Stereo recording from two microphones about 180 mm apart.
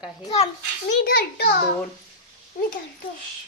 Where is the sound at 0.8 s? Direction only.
60° left (ahead or behind).